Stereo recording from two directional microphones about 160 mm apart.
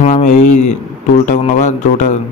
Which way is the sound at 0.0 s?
50° left (ahead or behind).